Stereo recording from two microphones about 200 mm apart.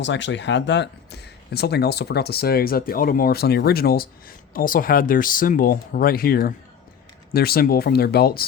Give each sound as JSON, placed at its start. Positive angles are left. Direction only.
{"t": 0.0, "sound": "speech", "side_deg": 65}